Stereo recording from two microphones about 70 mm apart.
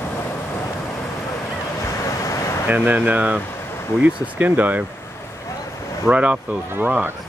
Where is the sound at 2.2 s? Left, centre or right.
Left.